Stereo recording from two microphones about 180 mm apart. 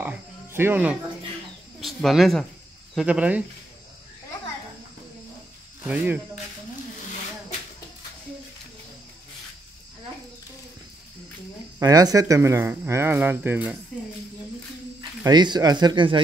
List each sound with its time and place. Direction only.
0.0 s cricket: 10° right (ahead or behind)
1.8 s speech: centre (ahead or behind)
5.9 s speech: 10° right (ahead or behind)
11.8 s speech: 20° right (ahead or behind)
15.0 s speech: 25° right (ahead or behind)